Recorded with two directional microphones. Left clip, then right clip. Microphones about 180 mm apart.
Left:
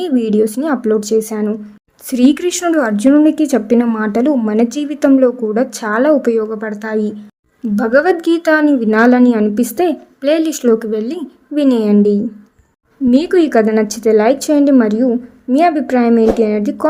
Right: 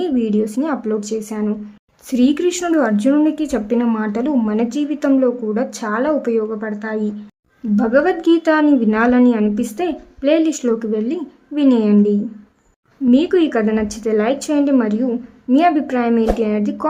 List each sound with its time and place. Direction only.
0.0 s speech: 30° left (ahead or behind)